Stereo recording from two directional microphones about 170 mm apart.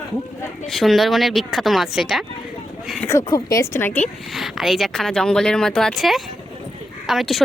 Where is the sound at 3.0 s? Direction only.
20° left (ahead or behind).